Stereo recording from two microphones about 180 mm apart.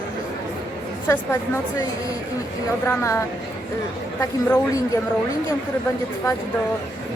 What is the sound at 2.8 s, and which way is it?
Speech, 15° left (ahead or behind).